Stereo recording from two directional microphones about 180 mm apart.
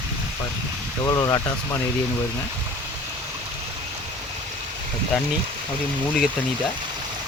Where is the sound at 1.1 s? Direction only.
20° left (ahead or behind).